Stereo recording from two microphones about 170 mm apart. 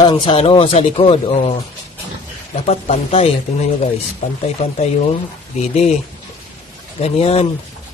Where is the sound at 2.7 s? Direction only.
35° left (ahead or behind).